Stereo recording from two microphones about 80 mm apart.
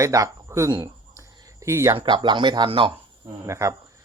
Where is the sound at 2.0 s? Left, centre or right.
Right.